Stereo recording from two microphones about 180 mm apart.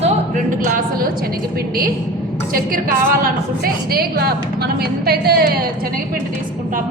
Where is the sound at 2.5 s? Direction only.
50° right (ahead or behind).